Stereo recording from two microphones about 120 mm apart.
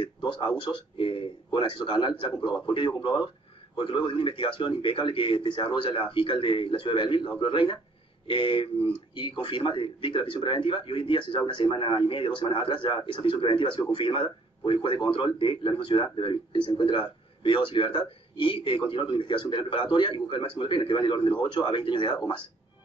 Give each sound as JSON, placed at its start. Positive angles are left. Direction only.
{"t": 0.0, "sound": "a man's voice", "side_deg": 40}